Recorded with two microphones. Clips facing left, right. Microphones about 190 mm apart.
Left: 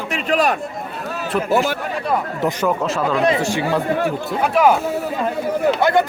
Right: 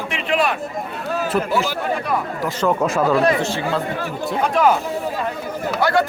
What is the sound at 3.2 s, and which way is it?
Speech, 15° left (ahead or behind).